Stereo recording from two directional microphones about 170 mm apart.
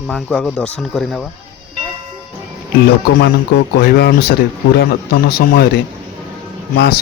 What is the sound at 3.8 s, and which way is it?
Speech, 65° left (ahead or behind).